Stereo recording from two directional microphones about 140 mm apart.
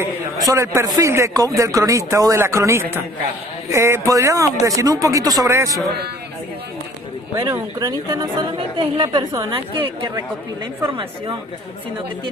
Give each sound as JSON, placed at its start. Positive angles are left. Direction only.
{"t": 0.0, "sound": "a man's voice", "side_deg": -20}
{"t": 7.3, "sound": "a man's voice", "side_deg": -25}